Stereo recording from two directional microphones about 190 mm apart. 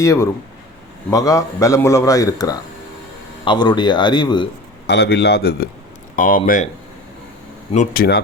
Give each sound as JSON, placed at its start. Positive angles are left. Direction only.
{"t": 0.0, "sound": "a man's voice", "side_deg": 15}
{"t": 4.9, "sound": "a man's voice", "side_deg": 60}
{"t": 7.9, "sound": "a man's voice", "side_deg": 60}